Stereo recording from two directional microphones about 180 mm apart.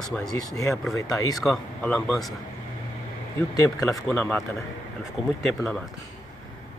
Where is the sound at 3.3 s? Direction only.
20° left (ahead or behind).